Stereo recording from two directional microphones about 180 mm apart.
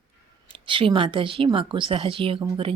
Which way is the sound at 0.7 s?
30° right (ahead or behind).